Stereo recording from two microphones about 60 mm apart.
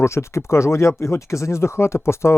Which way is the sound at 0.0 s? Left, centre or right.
Left.